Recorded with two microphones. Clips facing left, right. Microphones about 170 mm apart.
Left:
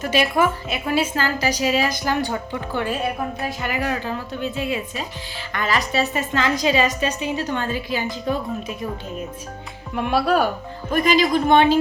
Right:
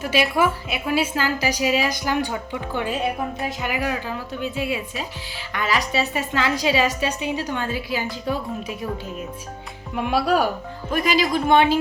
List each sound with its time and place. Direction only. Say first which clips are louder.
0.0 s a woman's voice: left 1 dB; 10° right (ahead or behind)
9.9 s a woman's voice: left 1 dB; 5° right (ahead or behind)